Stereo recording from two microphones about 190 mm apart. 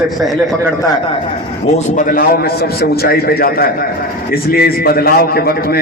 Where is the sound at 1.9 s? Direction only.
45° left (ahead or behind).